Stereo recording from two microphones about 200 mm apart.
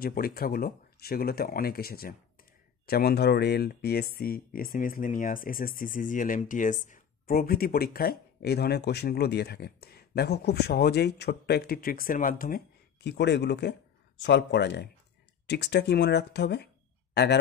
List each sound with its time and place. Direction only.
0.0 s speech: 50° left (ahead or behind)